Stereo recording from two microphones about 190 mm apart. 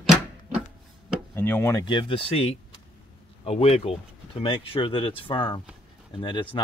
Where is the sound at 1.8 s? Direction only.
25° left (ahead or behind).